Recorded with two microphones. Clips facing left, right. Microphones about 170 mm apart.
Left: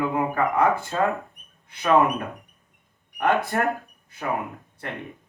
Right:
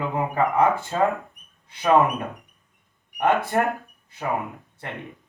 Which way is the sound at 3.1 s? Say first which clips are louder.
Right 1 dB; 20° right (ahead or behind).